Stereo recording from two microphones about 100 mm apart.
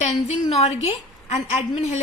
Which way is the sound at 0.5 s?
90° left.